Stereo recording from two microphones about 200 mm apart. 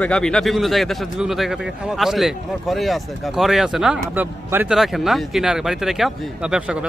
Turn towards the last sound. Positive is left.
turn(degrees=-5)  # may be behind; listen again after turning